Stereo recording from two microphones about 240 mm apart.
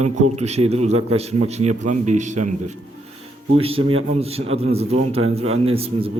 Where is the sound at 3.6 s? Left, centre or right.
Right.